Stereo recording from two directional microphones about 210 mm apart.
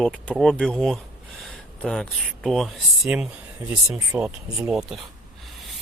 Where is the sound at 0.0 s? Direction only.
Centre (ahead or behind).